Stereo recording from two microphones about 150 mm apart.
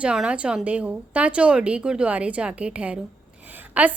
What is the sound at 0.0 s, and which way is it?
A woman's voice, 5° right (ahead or behind).